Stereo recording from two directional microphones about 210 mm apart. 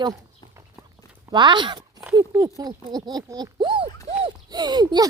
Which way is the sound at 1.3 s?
20° right (ahead or behind).